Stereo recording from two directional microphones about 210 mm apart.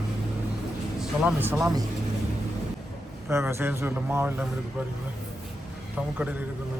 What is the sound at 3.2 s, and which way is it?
Speech, 10° right (ahead or behind).